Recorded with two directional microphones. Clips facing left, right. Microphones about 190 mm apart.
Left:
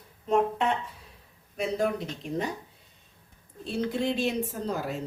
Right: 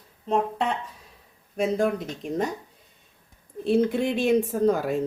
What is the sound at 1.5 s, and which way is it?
Speech, 45° right (ahead or behind).